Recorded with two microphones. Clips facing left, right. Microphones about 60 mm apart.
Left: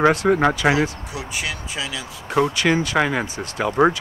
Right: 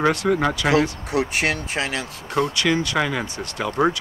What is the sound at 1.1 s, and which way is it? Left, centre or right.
Speech, right.